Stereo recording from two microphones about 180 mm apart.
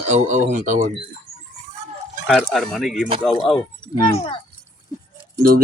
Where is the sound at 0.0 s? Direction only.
40° right (ahead or behind).